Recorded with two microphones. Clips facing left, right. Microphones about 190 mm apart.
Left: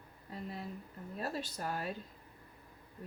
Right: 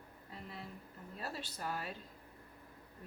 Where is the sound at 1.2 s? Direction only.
45° left (ahead or behind).